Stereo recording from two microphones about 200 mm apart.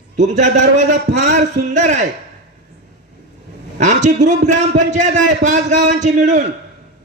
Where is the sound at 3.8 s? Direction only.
35° right (ahead or behind).